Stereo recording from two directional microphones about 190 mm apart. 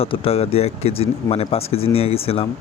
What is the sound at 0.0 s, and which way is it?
Speech, 30° left (ahead or behind).